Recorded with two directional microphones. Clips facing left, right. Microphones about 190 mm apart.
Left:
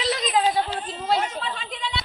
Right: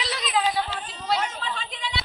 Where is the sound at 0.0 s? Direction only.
40° left (ahead or behind).